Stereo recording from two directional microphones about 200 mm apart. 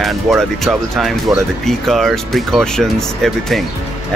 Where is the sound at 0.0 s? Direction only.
Centre (ahead or behind).